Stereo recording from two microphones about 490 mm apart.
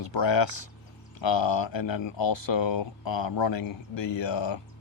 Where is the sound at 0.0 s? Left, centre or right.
Left.